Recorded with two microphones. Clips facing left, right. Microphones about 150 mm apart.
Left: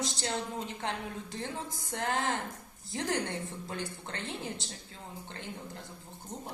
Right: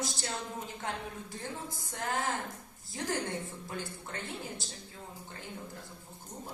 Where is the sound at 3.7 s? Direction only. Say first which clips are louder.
Left 1 dB; 75° left (ahead or behind).